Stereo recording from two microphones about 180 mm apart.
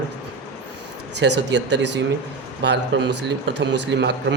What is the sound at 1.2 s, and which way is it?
Speech, 80° right.